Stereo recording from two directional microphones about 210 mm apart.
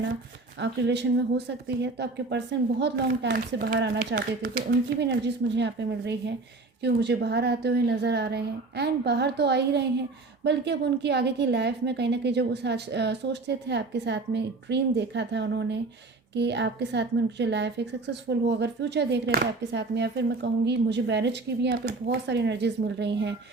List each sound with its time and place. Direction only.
0.6 s a woman's voice: 55° right (ahead or behind)